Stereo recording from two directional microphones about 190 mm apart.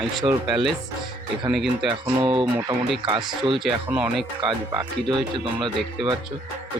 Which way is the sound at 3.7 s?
5° right (ahead or behind).